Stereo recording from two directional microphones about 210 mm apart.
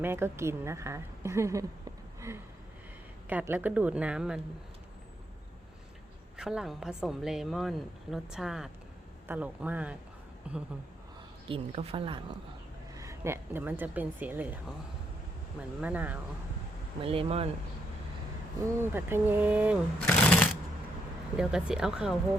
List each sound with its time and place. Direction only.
0.0 s speech: 10° right (ahead or behind)
6.3 s a woman's voice: 5° right (ahead or behind)
11.4 s a woman's voice: 25° right (ahead or behind)
13.0 s speech: 15° right (ahead or behind)
15.8 s speech: 5° right (ahead or behind)
17.0 s a woman's voice: 25° right (ahead or behind)
18.6 s a woman's voice: 10° right (ahead or behind)